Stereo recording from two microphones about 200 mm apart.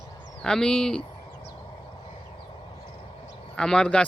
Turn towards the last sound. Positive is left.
turn(degrees=5)  # may be behind; listen again after turning